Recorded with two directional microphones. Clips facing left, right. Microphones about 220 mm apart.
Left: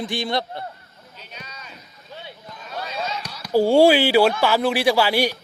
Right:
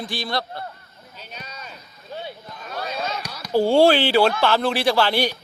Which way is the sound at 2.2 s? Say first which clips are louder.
Right 4 dB; 50° right (ahead or behind).